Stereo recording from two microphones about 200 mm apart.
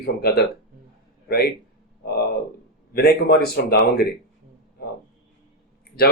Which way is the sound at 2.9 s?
50° left (ahead or behind).